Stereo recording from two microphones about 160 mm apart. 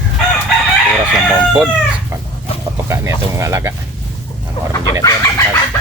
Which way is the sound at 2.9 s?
15° right (ahead or behind).